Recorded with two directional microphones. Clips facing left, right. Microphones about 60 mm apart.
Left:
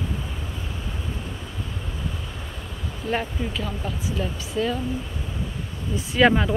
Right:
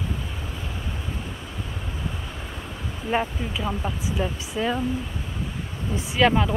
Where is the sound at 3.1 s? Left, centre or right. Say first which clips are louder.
Right 1 dB; centre.